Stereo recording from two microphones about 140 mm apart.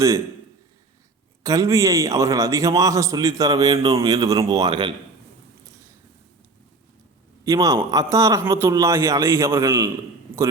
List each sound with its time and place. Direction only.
1.5 s a man's voice: 25° right (ahead or behind)
7.4 s a man's voice: 25° right (ahead or behind)